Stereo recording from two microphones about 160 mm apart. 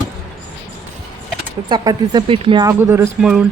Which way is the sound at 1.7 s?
30° right (ahead or behind).